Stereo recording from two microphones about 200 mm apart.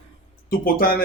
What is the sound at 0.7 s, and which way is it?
Speech, 50° left (ahead or behind).